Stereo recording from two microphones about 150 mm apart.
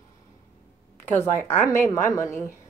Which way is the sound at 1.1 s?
15° left (ahead or behind).